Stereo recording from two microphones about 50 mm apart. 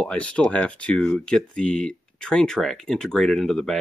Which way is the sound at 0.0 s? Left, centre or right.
Left.